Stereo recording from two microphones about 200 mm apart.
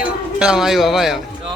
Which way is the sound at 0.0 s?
5° right (ahead or behind).